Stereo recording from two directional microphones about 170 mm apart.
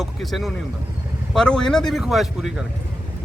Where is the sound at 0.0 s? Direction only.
Centre (ahead or behind).